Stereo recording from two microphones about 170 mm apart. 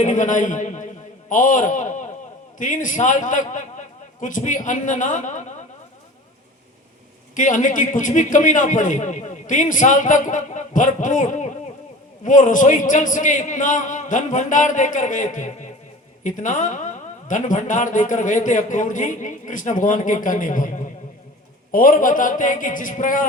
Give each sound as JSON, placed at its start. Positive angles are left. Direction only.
{"t": 0.0, "sound": "a woman's voice", "side_deg": 50}
{"t": 7.3, "sound": "a woman's voice", "side_deg": 50}